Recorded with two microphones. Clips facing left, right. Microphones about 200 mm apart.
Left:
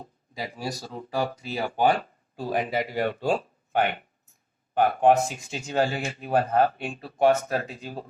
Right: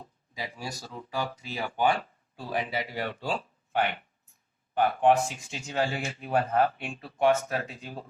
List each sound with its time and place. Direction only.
0.0 s speech: 45° left (ahead or behind)